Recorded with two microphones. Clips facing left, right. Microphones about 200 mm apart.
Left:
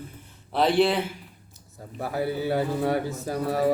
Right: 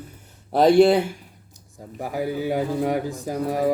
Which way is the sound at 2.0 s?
15° right (ahead or behind).